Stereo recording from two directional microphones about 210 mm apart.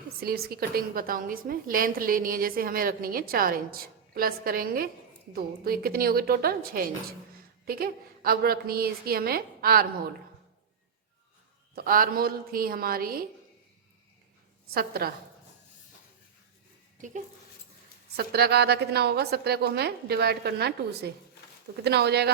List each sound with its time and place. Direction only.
0.2 s a woman's voice: 45° right (ahead or behind)
11.7 s a woman's voice: 45° right (ahead or behind)
14.7 s a woman's voice: 45° right (ahead or behind)
18.2 s a woman's voice: 50° right (ahead or behind)